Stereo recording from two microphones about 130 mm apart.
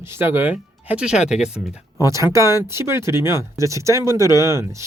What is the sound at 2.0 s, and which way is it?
Speech, 25° right (ahead or behind).